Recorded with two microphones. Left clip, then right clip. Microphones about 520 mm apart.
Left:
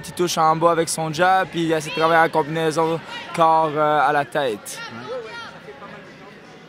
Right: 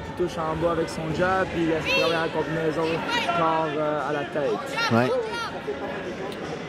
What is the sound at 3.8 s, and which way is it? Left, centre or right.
Speech, left.